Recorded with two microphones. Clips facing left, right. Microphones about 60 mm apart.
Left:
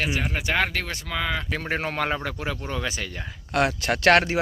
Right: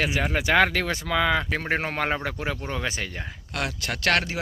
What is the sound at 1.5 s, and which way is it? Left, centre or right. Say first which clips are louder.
A man's voice: right 1 dB; right.